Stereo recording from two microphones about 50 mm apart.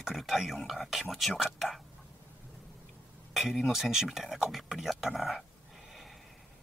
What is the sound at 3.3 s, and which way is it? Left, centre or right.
Speech, centre.